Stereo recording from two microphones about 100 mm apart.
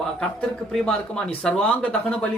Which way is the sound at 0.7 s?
Centre (ahead or behind).